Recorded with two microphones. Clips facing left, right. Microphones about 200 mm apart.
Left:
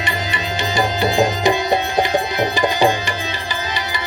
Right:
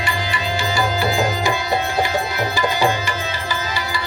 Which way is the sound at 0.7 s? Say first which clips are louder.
Left 4 dB; 20° left (ahead or behind).